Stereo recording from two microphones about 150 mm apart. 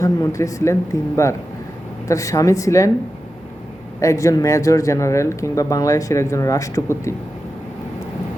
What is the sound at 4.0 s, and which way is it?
Speech, 20° left (ahead or behind).